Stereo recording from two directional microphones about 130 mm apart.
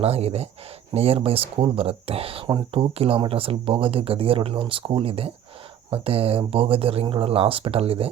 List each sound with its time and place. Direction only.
0.0 s speech: 50° right (ahead or behind)